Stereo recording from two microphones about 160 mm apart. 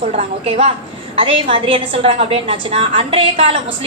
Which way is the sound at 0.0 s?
40° right (ahead or behind).